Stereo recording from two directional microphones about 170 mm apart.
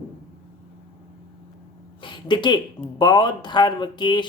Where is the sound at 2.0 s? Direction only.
25° left (ahead or behind).